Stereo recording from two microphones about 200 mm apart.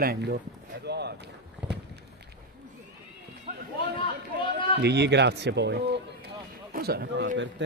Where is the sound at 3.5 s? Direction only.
40° right (ahead or behind).